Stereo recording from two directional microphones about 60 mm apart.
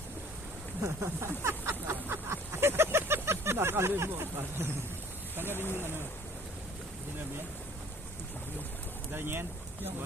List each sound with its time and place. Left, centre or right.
0.8 s a sound: right
5.5 s speech: left
9.1 s speech: right